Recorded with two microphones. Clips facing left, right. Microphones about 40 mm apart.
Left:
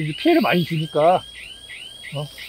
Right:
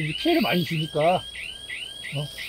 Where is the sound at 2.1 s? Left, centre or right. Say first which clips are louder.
Left 3 dB; centre.